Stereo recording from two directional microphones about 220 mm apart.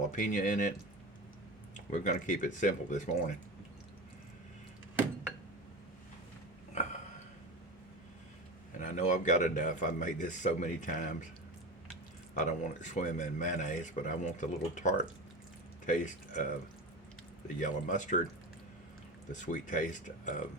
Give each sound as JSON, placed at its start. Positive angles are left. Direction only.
{"t": 0.1, "sound": "speech", "side_deg": 35}
{"t": 1.7, "sound": "speech", "side_deg": 35}
{"t": 8.8, "sound": "speech", "side_deg": 35}
{"t": 12.3, "sound": "speech", "side_deg": 35}
{"t": 17.6, "sound": "speech", "side_deg": 35}
{"t": 19.3, "sound": "speech", "side_deg": 35}